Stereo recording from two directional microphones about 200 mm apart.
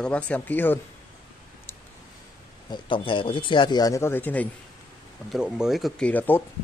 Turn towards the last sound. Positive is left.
turn(degrees=10)  # may be behind; listen again after turning